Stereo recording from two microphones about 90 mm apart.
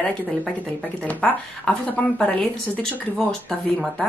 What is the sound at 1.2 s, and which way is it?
Speech, 15° left (ahead or behind).